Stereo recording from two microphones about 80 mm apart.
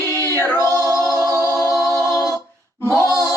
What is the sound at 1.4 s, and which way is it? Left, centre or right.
A capella, left.